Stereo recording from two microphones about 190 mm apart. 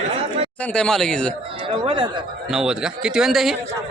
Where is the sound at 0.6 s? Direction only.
5° left (ahead or behind).